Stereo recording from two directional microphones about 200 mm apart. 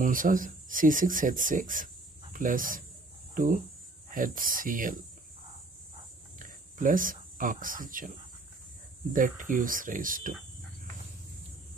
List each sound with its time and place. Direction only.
0.0 s speech: 40° right (ahead or behind)
6.4 s speech: 40° right (ahead or behind)
9.1 s speech: 40° right (ahead or behind)